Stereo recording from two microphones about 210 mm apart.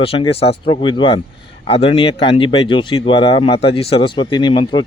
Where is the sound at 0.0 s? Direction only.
30° left (ahead or behind).